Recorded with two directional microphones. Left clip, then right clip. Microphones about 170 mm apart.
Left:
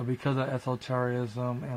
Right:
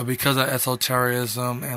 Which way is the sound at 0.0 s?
20° right (ahead or behind).